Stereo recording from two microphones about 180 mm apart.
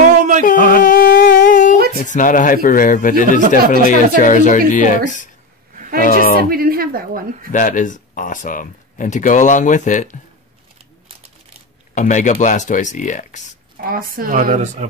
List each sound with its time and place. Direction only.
0.5 s a sound: 50° left (ahead or behind)
2.0 s speech: 45° left (ahead or behind)
6.5 s a woman's voice: 55° right (ahead or behind)
7.5 s speech: 45° left (ahead or behind)
11.9 s speech: 45° left (ahead or behind)
13.7 s speech: 55° right (ahead or behind)